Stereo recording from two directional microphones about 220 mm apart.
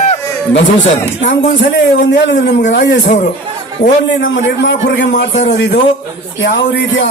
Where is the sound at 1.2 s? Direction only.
55° left (ahead or behind).